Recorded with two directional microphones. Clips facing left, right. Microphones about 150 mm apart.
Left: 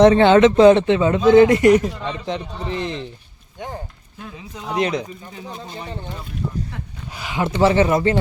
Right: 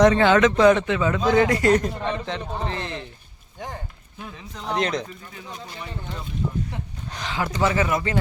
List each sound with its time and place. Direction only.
0.0 s speech: 25° left (ahead or behind)
1.7 s speech: 15° left (ahead or behind)
4.5 s speech: 10° left (ahead or behind)
5.3 s speech: 25° left (ahead or behind)
7.1 s speech: 5° left (ahead or behind)
7.3 s speech: 25° left (ahead or behind)